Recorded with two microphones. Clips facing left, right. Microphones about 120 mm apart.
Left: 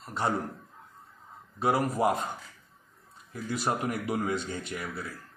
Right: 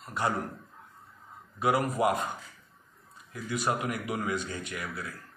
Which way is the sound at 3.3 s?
30° left (ahead or behind).